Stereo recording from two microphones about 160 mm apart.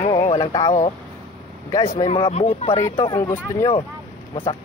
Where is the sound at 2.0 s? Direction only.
40° left (ahead or behind).